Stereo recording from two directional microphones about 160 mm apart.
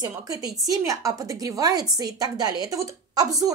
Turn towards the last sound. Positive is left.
turn(degrees=-20)  # may be behind; listen again after turning